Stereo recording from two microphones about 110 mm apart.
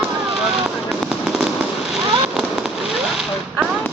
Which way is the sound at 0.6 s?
5° right (ahead or behind).